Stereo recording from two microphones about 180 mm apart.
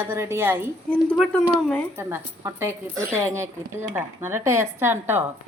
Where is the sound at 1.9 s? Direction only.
15° right (ahead or behind).